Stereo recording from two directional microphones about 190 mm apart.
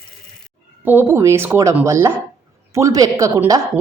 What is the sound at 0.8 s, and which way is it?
Speech, 10° right (ahead or behind).